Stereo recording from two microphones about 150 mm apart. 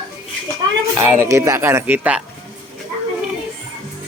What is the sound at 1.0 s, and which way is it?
Speech, 15° right (ahead or behind).